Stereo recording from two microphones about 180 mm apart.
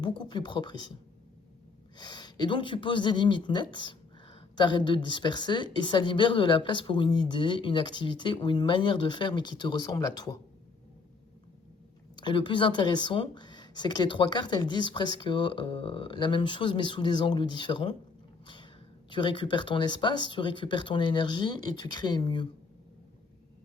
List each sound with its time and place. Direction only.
0.0 s speech: 25° left (ahead or behind)
2.0 s speech: 25° left (ahead or behind)
12.1 s speech: 25° left (ahead or behind)
18.4 s a sound: 25° left (ahead or behind)
19.1 s speech: 25° left (ahead or behind)